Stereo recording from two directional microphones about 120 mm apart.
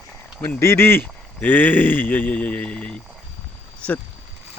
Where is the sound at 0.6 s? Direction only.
20° left (ahead or behind).